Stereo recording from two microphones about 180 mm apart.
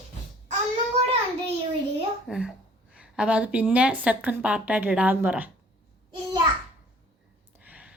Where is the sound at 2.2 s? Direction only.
5° right (ahead or behind).